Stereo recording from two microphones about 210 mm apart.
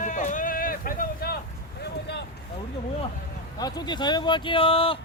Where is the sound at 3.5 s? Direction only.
20° left (ahead or behind).